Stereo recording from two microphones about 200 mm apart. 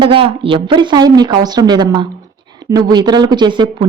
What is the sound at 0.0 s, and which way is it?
Speech, 25° right (ahead or behind).